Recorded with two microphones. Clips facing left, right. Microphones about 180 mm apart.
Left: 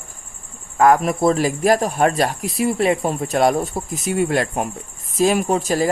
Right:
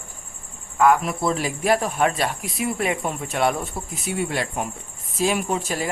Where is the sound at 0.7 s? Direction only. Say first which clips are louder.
Left 3 dB; 45° left (ahead or behind).